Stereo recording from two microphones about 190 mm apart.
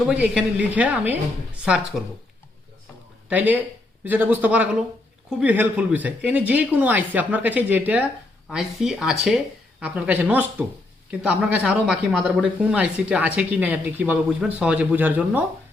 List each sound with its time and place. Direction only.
0.1 s speech: 5° right (ahead or behind)
3.2 s speech: 10° right (ahead or behind)